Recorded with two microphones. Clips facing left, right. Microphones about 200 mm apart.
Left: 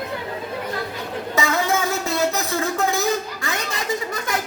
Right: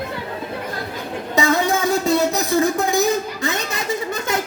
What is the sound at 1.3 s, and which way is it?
Music, 15° right (ahead or behind).